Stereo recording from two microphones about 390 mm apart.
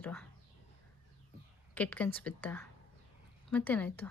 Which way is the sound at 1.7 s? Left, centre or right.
Centre.